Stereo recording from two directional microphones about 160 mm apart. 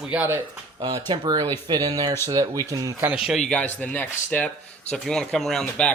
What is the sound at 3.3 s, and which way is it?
Speech, centre (ahead or behind).